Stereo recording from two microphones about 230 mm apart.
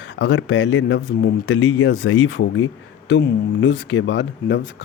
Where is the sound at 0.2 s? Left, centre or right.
Left.